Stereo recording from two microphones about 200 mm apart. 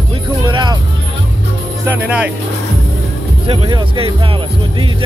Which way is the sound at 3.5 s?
25° right (ahead or behind).